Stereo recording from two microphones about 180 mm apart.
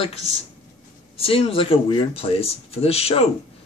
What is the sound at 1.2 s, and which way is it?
Speech, 30° left (ahead or behind).